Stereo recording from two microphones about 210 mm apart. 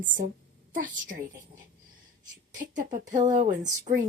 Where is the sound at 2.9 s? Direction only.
35° right (ahead or behind).